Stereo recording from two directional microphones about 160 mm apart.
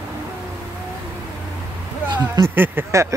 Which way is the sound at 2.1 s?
25° right (ahead or behind).